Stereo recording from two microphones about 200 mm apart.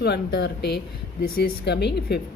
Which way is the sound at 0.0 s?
55° left (ahead or behind).